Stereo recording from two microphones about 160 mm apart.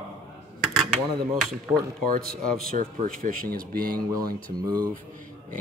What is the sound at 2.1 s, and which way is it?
Speech, 60° right (ahead or behind).